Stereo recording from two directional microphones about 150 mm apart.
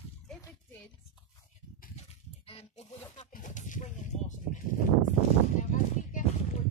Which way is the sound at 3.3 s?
55° left (ahead or behind).